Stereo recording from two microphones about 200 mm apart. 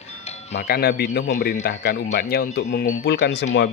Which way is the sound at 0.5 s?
50° left (ahead or behind).